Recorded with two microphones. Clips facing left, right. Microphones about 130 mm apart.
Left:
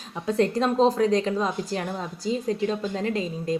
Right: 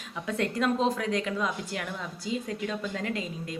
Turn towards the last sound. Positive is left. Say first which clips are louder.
# left 8 dB
turn(degrees=35)  # may be behind; listen again after turning